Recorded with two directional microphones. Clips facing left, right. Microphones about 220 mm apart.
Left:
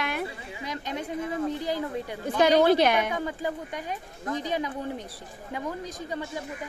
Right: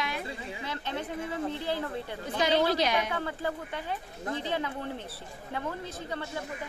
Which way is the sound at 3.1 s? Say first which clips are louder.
Left 2 dB; 15° left (ahead or behind).